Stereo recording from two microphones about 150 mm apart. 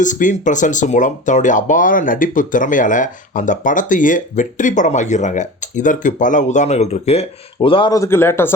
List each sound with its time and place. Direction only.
0.0 s speech: 55° left (ahead or behind); by 7.9 s 35° left (ahead or behind)
7.9 s a man's voice: 15° left (ahead or behind)